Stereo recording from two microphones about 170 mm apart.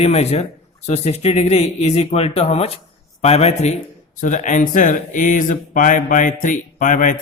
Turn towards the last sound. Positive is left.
turn(degrees=50)  # may be behind; listen again after turning